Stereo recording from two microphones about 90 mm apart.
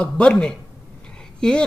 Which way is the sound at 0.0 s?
10° left (ahead or behind).